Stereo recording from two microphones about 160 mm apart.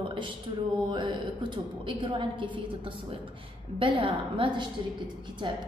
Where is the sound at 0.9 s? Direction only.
30° right (ahead or behind).